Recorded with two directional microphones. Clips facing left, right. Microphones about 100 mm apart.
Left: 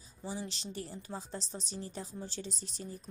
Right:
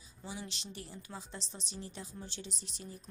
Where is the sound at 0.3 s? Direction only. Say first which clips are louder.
Left 4 dB; 35° left (ahead or behind).